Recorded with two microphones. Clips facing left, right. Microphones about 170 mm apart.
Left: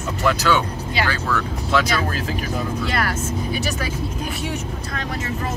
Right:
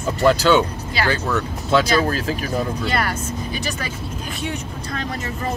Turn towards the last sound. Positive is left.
turn(degrees=5)  # may be behind; listen again after turning